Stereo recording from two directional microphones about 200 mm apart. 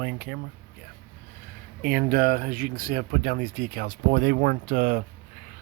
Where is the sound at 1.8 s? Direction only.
45° right (ahead or behind).